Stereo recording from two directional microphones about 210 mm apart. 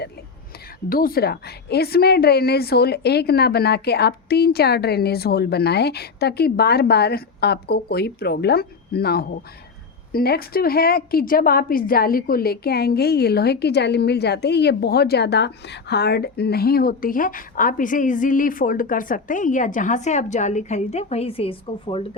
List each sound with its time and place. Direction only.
0.9 s a woman's voice: 45° left (ahead or behind); by 22.0 s 25° left (ahead or behind)